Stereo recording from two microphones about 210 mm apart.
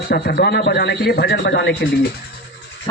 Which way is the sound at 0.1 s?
50° left (ahead or behind).